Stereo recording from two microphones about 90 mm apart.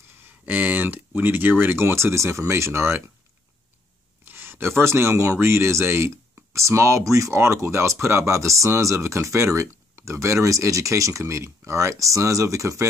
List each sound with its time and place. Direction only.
0.5 s speech: 20° right (ahead or behind)
4.2 s speech: 25° right (ahead or behind)